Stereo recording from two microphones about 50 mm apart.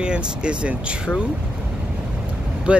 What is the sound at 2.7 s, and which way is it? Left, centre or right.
Speech, right.